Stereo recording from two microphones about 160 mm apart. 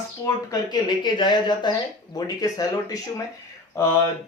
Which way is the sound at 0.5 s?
25° left (ahead or behind).